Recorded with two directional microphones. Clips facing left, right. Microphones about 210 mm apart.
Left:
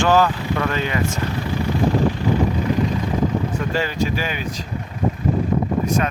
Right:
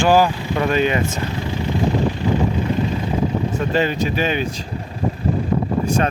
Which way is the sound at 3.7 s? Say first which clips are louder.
Right 4 dB; 20° right (ahead or behind).